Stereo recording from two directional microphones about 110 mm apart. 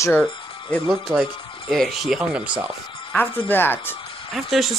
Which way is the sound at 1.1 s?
Centre (ahead or behind).